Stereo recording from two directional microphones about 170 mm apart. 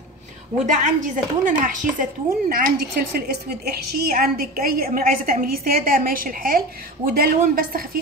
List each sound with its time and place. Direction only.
0.8 s a woman's voice: 50° right (ahead or behind)